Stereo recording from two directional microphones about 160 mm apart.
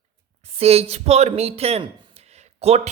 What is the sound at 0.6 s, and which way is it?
A woman's voice, 40° right (ahead or behind).